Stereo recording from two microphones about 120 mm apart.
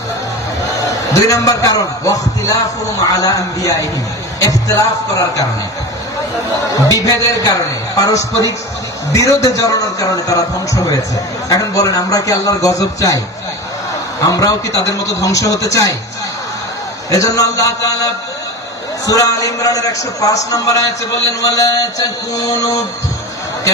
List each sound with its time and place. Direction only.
1.1 s a man's voice: 30° left (ahead or behind)
6.8 s a man's voice: 30° left (ahead or behind)
11.4 s a man's voice: 30° left (ahead or behind)
14.2 s a man's voice: 30° left (ahead or behind)
17.1 s a man's voice: 30° left (ahead or behind)